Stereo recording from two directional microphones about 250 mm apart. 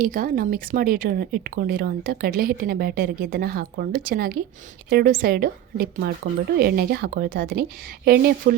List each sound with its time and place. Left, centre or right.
0.0 s speech: right